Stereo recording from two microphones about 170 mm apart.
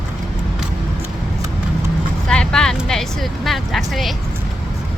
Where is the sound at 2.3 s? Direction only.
5° left (ahead or behind).